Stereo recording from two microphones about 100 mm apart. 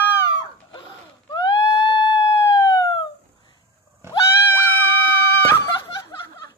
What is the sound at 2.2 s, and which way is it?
Police car, 30° left (ahead or behind).